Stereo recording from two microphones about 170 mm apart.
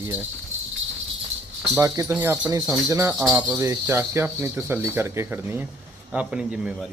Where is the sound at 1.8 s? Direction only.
15° right (ahead or behind).